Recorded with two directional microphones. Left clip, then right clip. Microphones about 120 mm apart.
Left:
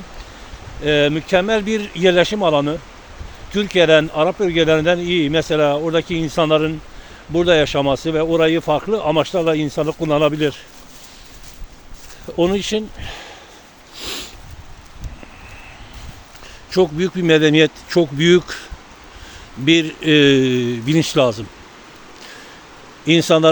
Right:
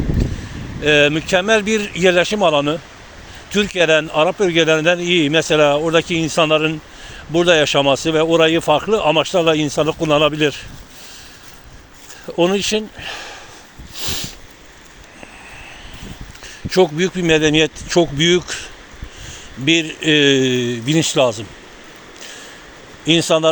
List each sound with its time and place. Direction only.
0.8 s a man's voice: 10° left (ahead or behind)
12.4 s speech: 30° left (ahead or behind)
13.9 s sniff: 40° left (ahead or behind)
16.6 s speech: 25° left (ahead or behind)
17.0 s speech: 50° left (ahead or behind)
23.0 s speech: 55° left (ahead or behind)